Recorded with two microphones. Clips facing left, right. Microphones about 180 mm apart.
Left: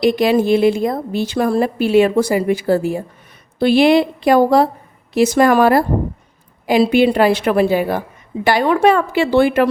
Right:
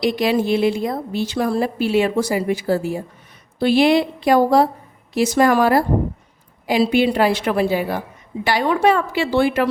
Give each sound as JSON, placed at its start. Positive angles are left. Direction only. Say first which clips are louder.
{"t": 0.0, "sound": "a woman's voice", "louder": "left 4 dB", "side_deg": 50}